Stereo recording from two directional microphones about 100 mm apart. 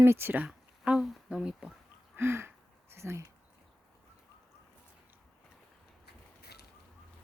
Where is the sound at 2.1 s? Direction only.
25° right (ahead or behind).